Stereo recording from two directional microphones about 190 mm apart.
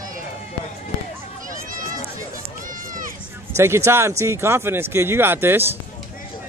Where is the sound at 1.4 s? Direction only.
45° right (ahead or behind).